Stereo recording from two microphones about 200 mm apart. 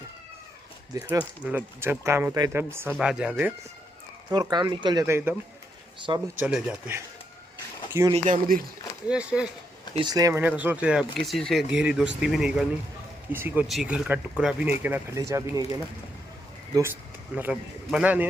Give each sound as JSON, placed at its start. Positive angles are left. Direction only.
{"t": 0.9, "sound": "speech", "side_deg": -10}
{"t": 4.3, "sound": "speech", "side_deg": -20}
{"t": 6.4, "sound": "speech", "side_deg": -5}
{"t": 8.1, "sound": "speech", "side_deg": -35}
{"t": 9.0, "sound": "speech", "side_deg": -5}
{"t": 9.9, "sound": "speech", "side_deg": -20}